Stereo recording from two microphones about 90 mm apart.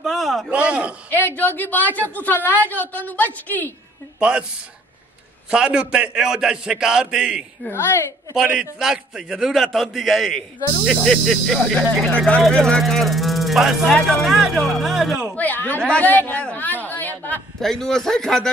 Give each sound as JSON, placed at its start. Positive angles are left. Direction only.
{"t": 0.0, "sound": "a sound", "side_deg": 0}
{"t": 0.5, "sound": "a man's voice", "side_deg": -15}
{"t": 1.1, "sound": "a woman's voice", "side_deg": 20}
{"t": 4.2, "sound": "a man's voice", "side_deg": -10}
{"t": 5.5, "sound": "a man's voice", "side_deg": -10}
{"t": 8.7, "sound": "a man's voice", "side_deg": -5}
{"t": 15.3, "sound": "a woman's voice", "side_deg": 20}
{"t": 16.8, "sound": "a sound", "side_deg": 20}
{"t": 17.6, "sound": "a man's voice", "side_deg": 5}